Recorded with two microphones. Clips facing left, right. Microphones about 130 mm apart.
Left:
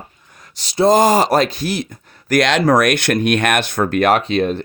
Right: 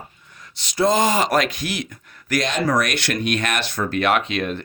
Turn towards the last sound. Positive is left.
turn(degrees=30)  # may be behind; listen again after turning